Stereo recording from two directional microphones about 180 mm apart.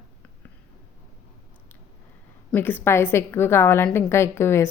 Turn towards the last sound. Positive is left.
turn(degrees=15)  # may be behind; listen again after turning